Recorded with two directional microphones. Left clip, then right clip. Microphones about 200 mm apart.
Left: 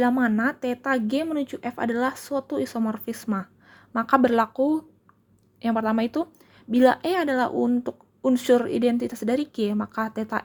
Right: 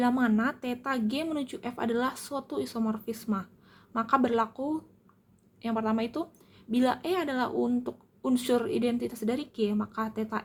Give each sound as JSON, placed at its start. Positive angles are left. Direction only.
{"t": 0.0, "sound": "speech", "side_deg": 25}